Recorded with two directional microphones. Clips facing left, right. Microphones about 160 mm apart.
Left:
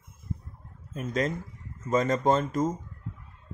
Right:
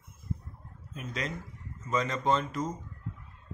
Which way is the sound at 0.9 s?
45° left (ahead or behind).